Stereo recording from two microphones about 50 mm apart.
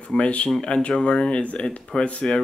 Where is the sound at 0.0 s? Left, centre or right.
Left.